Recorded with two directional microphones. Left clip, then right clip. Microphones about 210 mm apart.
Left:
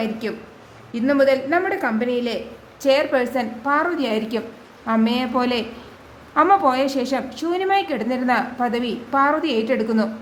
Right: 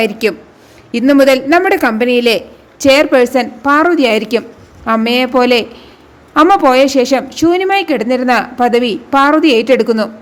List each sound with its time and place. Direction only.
0.0 s a woman's voice: 35° right (ahead or behind)